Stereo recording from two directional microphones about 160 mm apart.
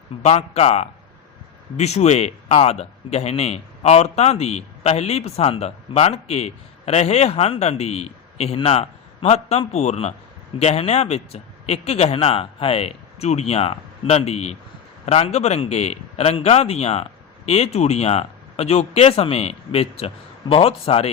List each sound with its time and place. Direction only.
0.2 s a man's voice: 40° left (ahead or behind)